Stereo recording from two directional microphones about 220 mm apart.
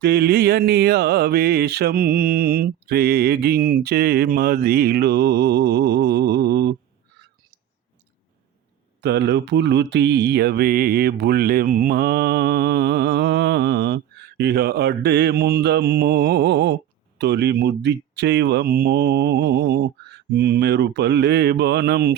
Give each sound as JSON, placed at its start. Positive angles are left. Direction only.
{"t": 0.0, "sound": "mantra", "side_deg": -45}
{"t": 9.0, "sound": "mantra", "side_deg": -50}